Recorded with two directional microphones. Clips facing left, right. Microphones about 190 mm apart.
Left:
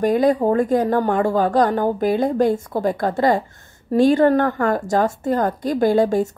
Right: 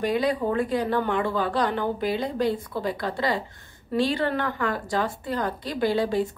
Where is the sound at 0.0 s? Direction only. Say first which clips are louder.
Left 7 dB; 45° left (ahead or behind).